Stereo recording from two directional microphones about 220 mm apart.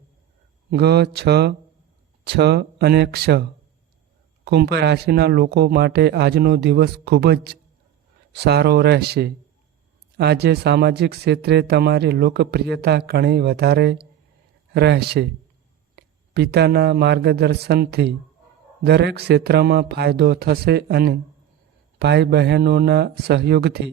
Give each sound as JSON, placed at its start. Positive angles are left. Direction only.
{"t": 0.7, "sound": "speech", "side_deg": -50}
{"t": 4.4, "sound": "speech", "side_deg": -50}